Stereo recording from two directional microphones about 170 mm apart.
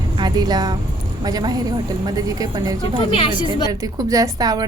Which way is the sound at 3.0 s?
35° left (ahead or behind).